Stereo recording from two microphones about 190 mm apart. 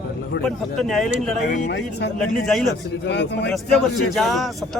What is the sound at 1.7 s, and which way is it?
Speech, 70° left (ahead or behind).